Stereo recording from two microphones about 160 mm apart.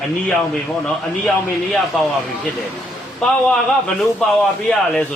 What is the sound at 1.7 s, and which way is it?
A man's voice, centre (ahead or behind).